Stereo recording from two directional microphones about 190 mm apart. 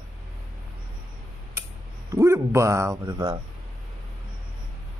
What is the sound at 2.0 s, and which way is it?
Speech, 15° right (ahead or behind).